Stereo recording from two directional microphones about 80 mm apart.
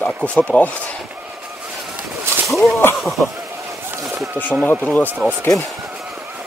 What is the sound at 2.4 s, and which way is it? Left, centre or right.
Speech, centre.